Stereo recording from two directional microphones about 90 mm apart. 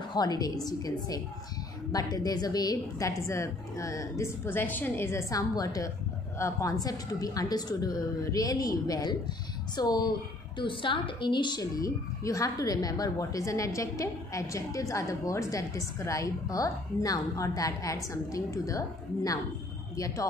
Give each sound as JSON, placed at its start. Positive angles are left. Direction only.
{"t": 0.1, "sound": "a woman's voice", "side_deg": 50}
{"t": 4.5, "sound": "a woman's voice", "side_deg": 20}
{"t": 5.3, "sound": "a woman's voice", "side_deg": 40}
{"t": 10.6, "sound": "a woman's voice", "side_deg": 70}